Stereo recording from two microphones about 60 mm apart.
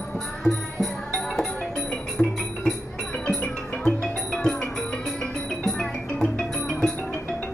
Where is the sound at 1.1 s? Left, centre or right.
Centre.